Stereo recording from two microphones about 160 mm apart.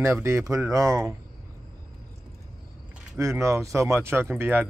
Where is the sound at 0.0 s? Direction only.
15° right (ahead or behind).